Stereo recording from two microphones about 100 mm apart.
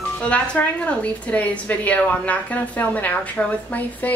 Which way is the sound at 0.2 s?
10° left (ahead or behind).